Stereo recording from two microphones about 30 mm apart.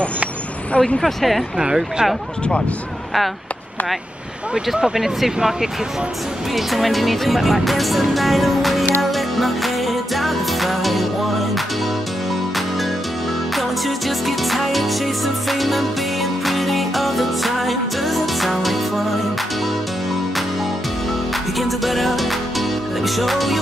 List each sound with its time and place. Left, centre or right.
0.7 s speech: centre
1.0 s speech: centre
1.6 s speech: right
4.8 s speech: centre
6.5 s speech: centre
9.0 s music: centre
13.6 s speech: centre
16.4 s music: centre
21.5 s speech: centre